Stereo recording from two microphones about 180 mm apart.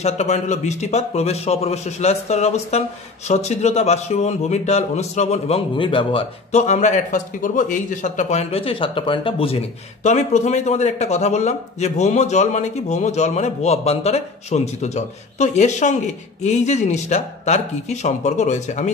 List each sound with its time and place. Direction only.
0.0 s a man's voice: 40° left (ahead or behind)